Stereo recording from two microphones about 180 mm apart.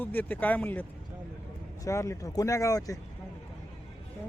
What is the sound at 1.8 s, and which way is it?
Speech, 15° left (ahead or behind).